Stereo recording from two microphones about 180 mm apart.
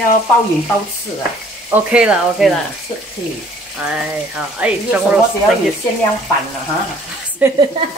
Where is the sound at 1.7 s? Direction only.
5° right (ahead or behind).